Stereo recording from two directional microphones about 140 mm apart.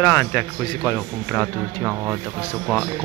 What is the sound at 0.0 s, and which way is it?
Speech, 20° left (ahead or behind).